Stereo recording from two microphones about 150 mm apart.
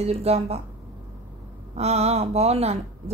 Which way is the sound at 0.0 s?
45° right (ahead or behind).